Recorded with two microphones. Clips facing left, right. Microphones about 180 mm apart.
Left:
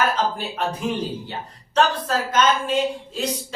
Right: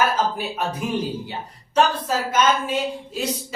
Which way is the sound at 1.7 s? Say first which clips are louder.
Even; 10° right (ahead or behind).